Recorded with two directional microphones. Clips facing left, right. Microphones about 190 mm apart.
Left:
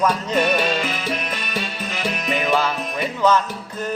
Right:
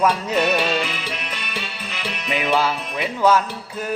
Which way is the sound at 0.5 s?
45° left (ahead or behind).